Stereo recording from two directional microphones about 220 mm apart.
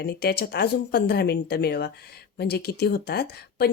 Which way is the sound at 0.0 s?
45° left (ahead or behind).